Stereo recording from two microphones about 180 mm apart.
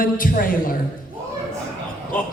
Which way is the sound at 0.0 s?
50° left (ahead or behind).